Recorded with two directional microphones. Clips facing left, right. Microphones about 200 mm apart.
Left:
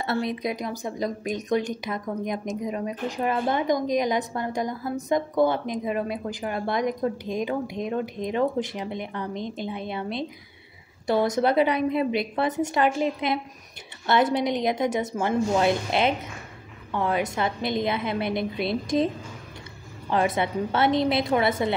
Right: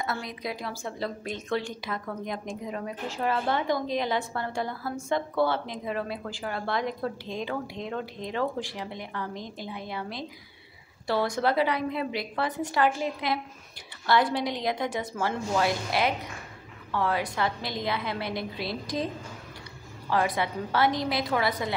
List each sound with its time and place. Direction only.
0.0 s a woman's voice: 25° left (ahead or behind)
20.1 s speech: 20° left (ahead or behind)